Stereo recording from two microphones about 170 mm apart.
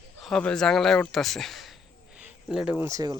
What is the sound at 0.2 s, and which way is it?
Speech, 5° left (ahead or behind).